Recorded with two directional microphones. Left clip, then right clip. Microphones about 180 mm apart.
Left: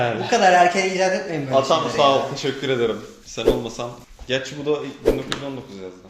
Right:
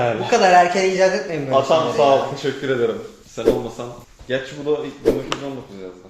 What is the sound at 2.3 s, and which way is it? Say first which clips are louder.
A man's voice: right 1 dB; 25° left (ahead or behind).